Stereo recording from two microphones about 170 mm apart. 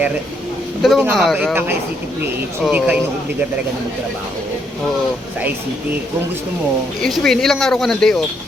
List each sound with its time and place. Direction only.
0.8 s speech: centre (ahead or behind)
2.6 s speech: 10° right (ahead or behind)
7.0 s speech: centre (ahead or behind)